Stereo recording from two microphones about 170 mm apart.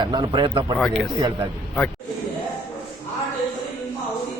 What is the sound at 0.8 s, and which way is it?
Speech, centre (ahead or behind).